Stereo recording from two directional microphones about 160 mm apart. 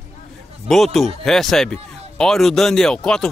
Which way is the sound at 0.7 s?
Centre (ahead or behind).